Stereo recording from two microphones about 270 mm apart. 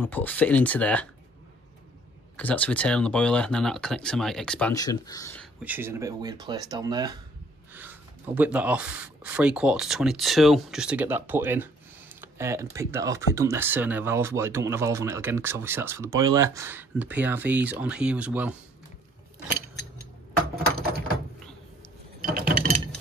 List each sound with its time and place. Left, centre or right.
0.0 s speech: centre
2.3 s speech: centre
5.6 s speech: centre
12.2 s computer keyboard: centre
12.7 s speech: centre
22.3 s mechanisms: right